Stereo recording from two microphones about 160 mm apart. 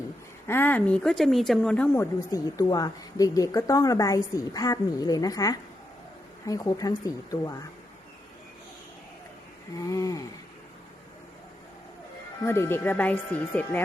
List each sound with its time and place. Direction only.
0.4 s a woman's voice: 15° left (ahead or behind)
9.8 s a woman's voice: 20° left (ahead or behind)
12.5 s speech: 15° left (ahead or behind)